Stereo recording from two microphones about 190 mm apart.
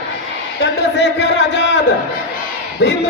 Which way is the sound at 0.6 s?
65° left (ahead or behind).